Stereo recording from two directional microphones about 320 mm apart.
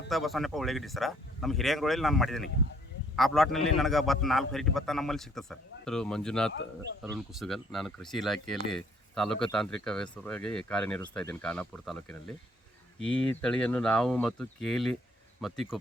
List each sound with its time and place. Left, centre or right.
0.1 s speech: centre